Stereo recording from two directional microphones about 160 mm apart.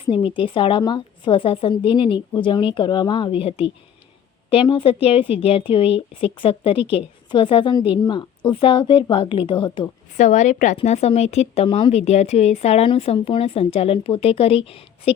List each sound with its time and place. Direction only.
0.0 s a woman's voice: 35° left (ahead or behind)
10.2 s a woman's voice: 50° left (ahead or behind)